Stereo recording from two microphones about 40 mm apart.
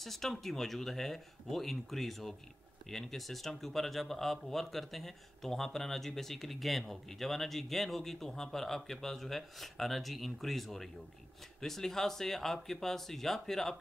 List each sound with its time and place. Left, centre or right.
0.0 s speech: centre